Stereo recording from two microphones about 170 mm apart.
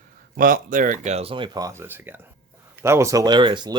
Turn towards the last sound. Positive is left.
turn(degrees=-25)  # may be behind; listen again after turning